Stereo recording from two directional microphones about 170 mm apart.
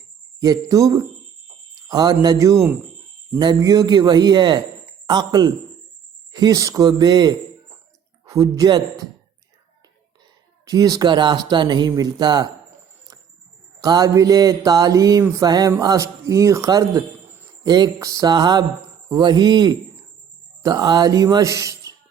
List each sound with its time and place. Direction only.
0.3 s mantra: 20° right (ahead or behind)
10.7 s mantra: 20° right (ahead or behind)
13.8 s mantra: 20° right (ahead or behind)
15.8 s speech: 20° right (ahead or behind)
17.6 s mantra: 25° right (ahead or behind)
19.0 s speech: 25° right (ahead or behind)